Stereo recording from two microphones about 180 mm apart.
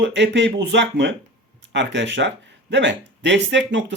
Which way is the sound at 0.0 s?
80° right.